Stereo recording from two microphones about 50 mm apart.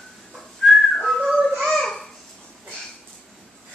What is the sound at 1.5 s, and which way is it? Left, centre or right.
Babbling, centre.